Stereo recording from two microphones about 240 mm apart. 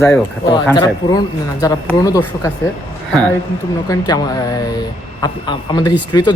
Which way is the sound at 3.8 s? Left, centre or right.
Centre.